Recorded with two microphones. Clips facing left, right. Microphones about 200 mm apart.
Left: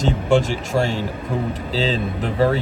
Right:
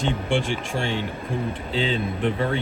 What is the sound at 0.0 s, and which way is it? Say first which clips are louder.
Speech: left 6 dB; 45° left (ahead or behind).